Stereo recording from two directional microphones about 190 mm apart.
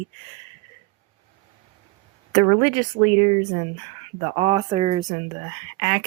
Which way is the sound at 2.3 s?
25° right (ahead or behind).